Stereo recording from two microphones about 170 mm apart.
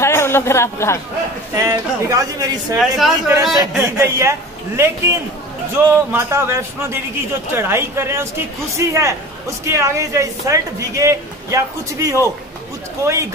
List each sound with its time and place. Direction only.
0.0 s speech: 15° left (ahead or behind)
1.5 s speech: 20° right (ahead or behind)
2.7 s speech: 5° right (ahead or behind)
3.8 s speech: 15° right (ahead or behind)